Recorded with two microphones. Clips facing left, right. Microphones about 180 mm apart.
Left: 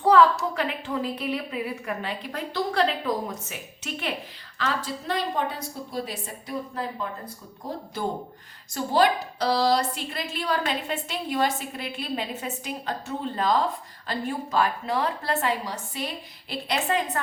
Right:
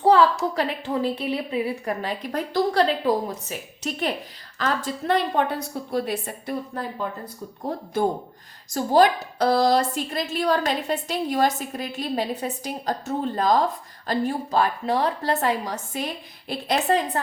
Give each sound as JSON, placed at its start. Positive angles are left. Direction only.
{"t": 0.0, "sound": "a sound", "side_deg": -30}
{"t": 0.5, "sound": "a woman's voice", "side_deg": -35}
{"t": 8.0, "sound": "a woman's voice", "side_deg": -50}